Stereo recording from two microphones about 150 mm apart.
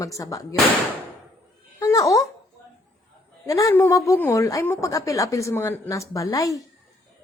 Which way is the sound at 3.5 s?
20° left (ahead or behind).